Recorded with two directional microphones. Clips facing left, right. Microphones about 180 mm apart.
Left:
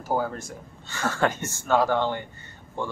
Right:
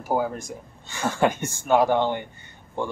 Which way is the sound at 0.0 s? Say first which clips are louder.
Right 2 dB; 15° right (ahead or behind).